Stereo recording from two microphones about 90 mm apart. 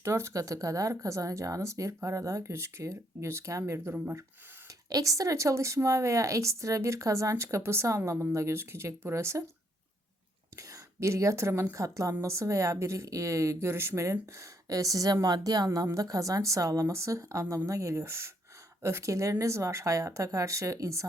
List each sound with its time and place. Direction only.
0.0 s speech: 30° right (ahead or behind)
4.9 s speech: 40° right (ahead or behind)
10.6 s speech: 35° right (ahead or behind)